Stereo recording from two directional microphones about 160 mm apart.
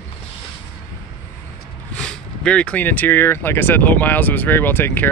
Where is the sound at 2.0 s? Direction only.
5° left (ahead or behind).